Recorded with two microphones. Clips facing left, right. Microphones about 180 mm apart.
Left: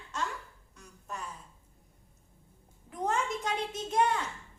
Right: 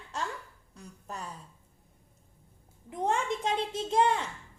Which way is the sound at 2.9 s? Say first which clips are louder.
Right 2 dB; 25° right (ahead or behind).